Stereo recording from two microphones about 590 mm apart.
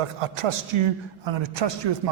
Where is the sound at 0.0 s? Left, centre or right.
Right.